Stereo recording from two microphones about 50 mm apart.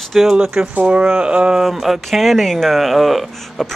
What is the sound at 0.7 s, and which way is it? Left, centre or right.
Speech, right.